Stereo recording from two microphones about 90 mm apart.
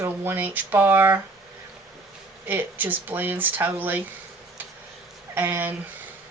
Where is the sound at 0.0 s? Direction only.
25° right (ahead or behind).